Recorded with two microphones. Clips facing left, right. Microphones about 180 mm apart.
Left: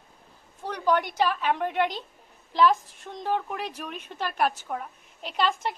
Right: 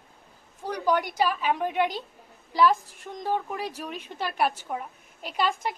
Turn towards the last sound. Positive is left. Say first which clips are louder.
# left 1 dB
turn(degrees=-10)  # may be behind; listen again after turning